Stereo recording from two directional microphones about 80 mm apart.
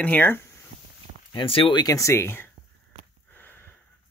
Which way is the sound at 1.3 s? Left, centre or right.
Left.